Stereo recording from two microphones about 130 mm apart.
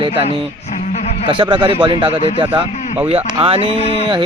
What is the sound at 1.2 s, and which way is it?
Speech, 35° right (ahead or behind).